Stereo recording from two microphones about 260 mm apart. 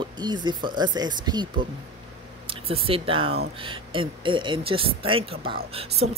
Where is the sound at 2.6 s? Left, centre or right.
Right.